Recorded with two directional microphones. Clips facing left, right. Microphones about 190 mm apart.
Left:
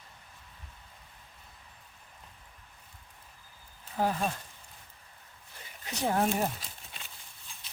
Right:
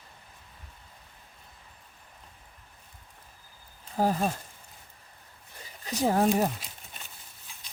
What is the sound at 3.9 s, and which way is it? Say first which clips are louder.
Speech: right 4 dB; 40° right (ahead or behind).